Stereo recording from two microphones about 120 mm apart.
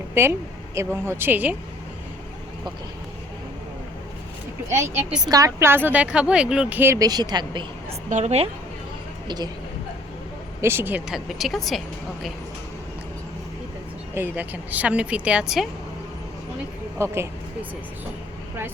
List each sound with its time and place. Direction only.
0.1 s a woman's voice: 20° right (ahead or behind)
4.7 s a woman's voice: 25° right (ahead or behind)
7.0 s speech: 35° right (ahead or behind)
8.1 s a woman's voice: 65° right (ahead or behind)
9.2 s speech: 35° right (ahead or behind)
10.6 s a woman's voice: 20° right (ahead or behind)
11.1 s speech: centre (ahead or behind)
14.1 s a woman's voice: 15° right (ahead or behind)
17.0 s speech: 20° right (ahead or behind)